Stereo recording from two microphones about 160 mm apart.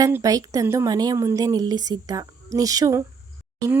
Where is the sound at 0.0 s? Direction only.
20° right (ahead or behind).